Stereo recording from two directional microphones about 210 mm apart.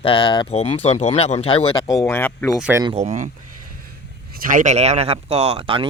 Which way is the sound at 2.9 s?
35° right (ahead or behind).